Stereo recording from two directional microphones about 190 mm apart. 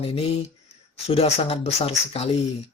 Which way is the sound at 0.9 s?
30° left (ahead or behind).